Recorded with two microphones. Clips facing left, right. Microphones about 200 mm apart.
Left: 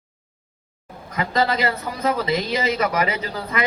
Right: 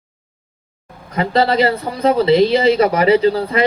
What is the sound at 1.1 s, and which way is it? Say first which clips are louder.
Speech: right 6 dB; 30° right (ahead or behind).